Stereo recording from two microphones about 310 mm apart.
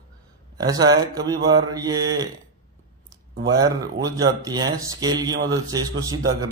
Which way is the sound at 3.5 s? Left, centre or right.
Centre.